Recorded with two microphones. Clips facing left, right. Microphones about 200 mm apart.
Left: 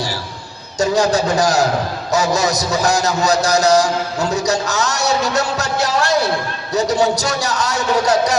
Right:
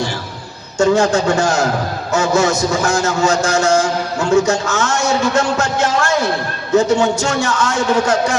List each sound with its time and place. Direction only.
0.8 s a man's voice: 35° left (ahead or behind)